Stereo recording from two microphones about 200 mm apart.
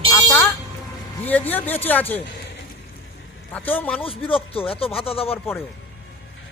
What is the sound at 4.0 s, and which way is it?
Speech, 25° left (ahead or behind).